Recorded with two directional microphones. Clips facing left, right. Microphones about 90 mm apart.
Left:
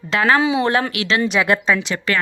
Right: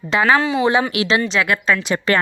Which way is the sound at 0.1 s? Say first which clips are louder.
Even; 5° right (ahead or behind).